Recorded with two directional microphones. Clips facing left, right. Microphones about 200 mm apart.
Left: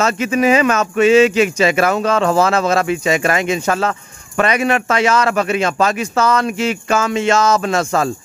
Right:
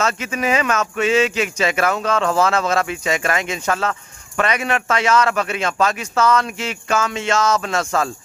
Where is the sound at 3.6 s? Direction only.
30° left (ahead or behind).